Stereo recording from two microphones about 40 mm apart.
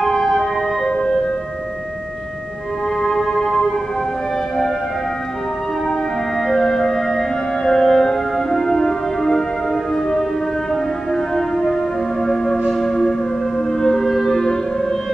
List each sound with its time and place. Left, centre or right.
0.0 s emergency vehicle: centre
0.9 s music: centre
3.0 s music: centre
6.4 s music: centre